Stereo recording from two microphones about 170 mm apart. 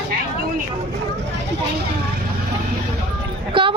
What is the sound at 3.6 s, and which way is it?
Speech, 30° right (ahead or behind).